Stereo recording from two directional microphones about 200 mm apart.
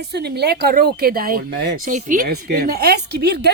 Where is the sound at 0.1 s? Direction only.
55° right (ahead or behind).